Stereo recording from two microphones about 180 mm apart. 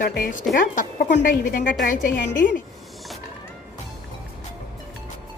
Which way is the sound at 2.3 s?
50° left (ahead or behind).